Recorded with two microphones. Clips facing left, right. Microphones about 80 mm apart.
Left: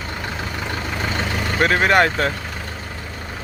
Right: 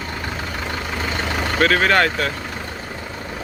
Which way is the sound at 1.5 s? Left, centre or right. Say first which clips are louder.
Left 1 dB; left.